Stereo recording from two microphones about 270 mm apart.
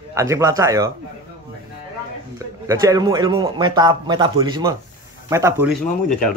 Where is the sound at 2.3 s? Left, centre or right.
Centre.